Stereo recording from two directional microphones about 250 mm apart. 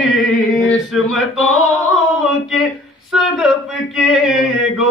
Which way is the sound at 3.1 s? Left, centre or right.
Centre.